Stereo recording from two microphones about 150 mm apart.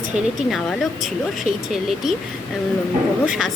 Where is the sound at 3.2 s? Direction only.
5° right (ahead or behind).